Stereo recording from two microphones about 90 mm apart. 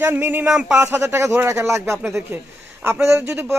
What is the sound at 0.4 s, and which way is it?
Speech, 10° right (ahead or behind).